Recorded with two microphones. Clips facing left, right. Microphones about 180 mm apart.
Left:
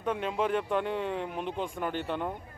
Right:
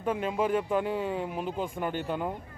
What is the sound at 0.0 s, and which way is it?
Speech, 5° right (ahead or behind).